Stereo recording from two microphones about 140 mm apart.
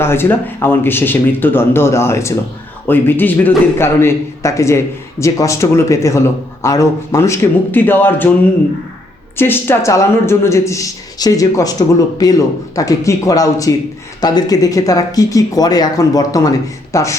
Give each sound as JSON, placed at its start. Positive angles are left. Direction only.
{"t": 0.0, "sound": "speech", "side_deg": 15}
{"t": 9.4, "sound": "speech", "side_deg": 15}